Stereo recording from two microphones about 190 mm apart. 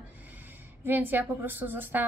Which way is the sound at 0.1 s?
10° right (ahead or behind).